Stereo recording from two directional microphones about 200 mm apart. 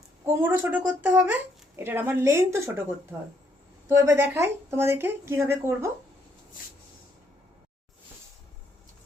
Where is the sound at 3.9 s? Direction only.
10° right (ahead or behind).